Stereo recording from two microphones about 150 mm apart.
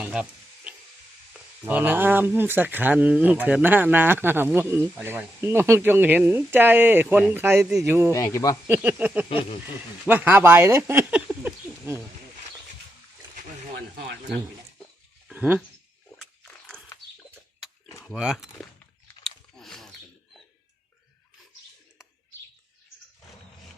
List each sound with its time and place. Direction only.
0.0 s frying: 5° right (ahead or behind)
1.3 s speech: 10° right (ahead or behind)
7.9 s speech: 15° right (ahead or behind)
8.1 s speech: 25° left (ahead or behind)
8.6 s speech: 10° right (ahead or behind)
15.3 s speech: 10° right (ahead or behind)
16.1 s a sound: 5° left (ahead or behind)
18.0 s speech: centre (ahead or behind)
19.0 s chewing: 5° left (ahead or behind)